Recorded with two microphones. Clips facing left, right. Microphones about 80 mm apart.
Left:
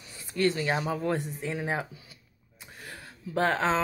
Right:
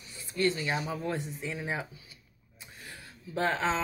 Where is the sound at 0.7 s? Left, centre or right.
Left.